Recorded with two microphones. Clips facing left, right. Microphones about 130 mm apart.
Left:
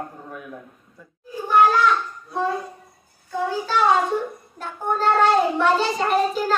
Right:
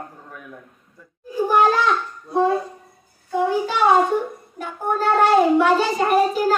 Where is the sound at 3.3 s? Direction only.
15° right (ahead or behind).